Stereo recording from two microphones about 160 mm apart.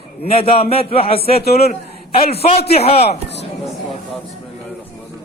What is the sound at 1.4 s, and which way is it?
Speech, 80° left.